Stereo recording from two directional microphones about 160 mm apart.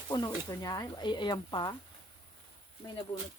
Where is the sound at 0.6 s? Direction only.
25° left (ahead or behind).